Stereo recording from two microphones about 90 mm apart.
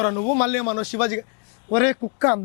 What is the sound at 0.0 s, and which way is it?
A man's voice, 15° left (ahead or behind).